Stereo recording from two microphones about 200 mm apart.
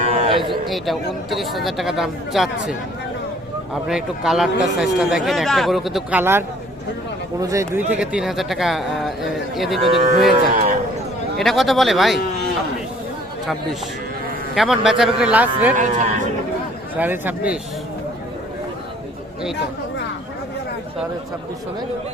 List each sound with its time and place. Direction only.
0.2 s a sound: 25° right (ahead or behind)
0.7 s speech: centre (ahead or behind)
3.8 s speech: centre (ahead or behind)
9.9 s a man's voice: 30° right (ahead or behind)
11.3 s speech: centre (ahead or behind)
14.5 s speech: centre (ahead or behind)
15.7 s a man's voice: 40° right (ahead or behind)
17.0 s a man's voice: 10° right (ahead or behind)